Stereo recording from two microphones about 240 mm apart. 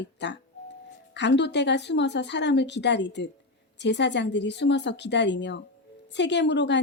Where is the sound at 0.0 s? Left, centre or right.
Left.